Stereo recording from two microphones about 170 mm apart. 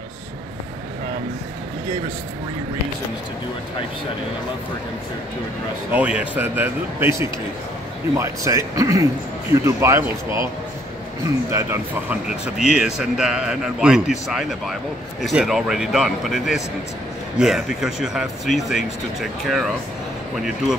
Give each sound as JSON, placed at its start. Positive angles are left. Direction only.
{"t": 5.9, "sound": "speech", "side_deg": -10}
{"t": 12.3, "sound": "a man's voice", "side_deg": -5}